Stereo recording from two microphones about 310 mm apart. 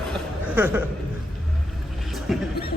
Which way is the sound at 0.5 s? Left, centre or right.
Centre.